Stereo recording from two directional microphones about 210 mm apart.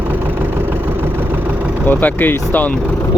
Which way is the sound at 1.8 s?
10° left (ahead or behind).